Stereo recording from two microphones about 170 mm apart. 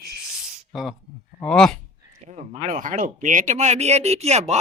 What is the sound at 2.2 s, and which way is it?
Speech, 45° right (ahead or behind).